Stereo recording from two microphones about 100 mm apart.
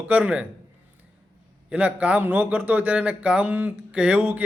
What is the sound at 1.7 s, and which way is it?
A man's voice, 15° right (ahead or behind).